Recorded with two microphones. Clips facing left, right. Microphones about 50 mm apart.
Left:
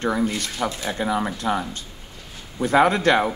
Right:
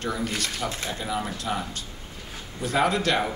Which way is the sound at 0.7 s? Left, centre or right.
Left.